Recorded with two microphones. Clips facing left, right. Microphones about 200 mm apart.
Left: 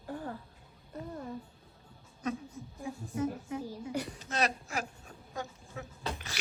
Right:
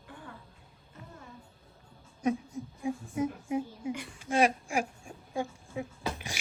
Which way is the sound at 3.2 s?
10° right (ahead or behind).